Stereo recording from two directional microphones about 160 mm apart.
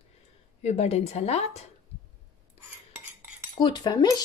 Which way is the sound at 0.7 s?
40° left (ahead or behind).